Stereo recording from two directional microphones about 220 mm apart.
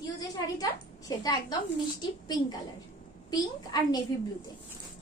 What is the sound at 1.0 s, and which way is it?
A woman's voice, 15° left (ahead or behind).